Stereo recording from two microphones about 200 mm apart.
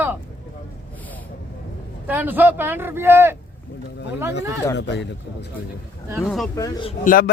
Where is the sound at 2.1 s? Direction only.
10° right (ahead or behind).